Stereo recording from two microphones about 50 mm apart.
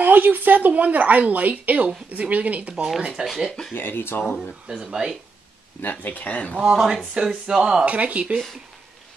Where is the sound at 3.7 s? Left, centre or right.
Left.